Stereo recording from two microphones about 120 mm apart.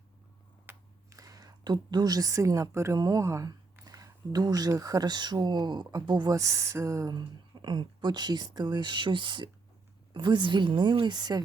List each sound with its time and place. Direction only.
1.1 s speech: 30° right (ahead or behind)